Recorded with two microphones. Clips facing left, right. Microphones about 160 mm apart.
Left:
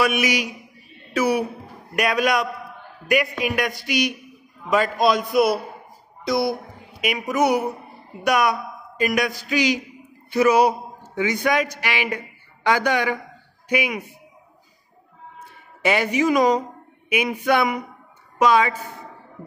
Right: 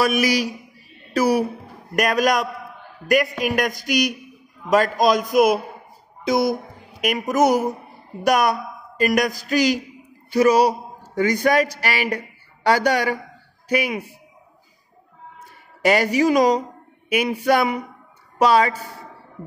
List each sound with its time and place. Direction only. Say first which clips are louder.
0.0 s a woman's voice: right 2 dB; 35° right (ahead or behind)
15.8 s speech: right 3 dB; 40° right (ahead or behind)